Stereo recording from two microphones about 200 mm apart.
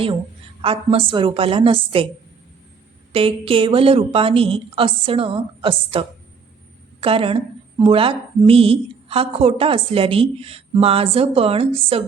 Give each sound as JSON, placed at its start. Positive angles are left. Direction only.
{"t": 0.6, "sound": "a woman's voice", "side_deg": -25}
{"t": 3.1, "sound": "a woman's voice", "side_deg": -25}